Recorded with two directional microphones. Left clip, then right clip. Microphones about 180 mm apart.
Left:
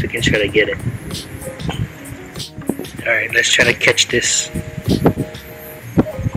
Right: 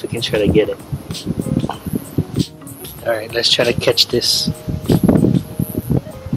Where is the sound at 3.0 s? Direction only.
10° right (ahead or behind).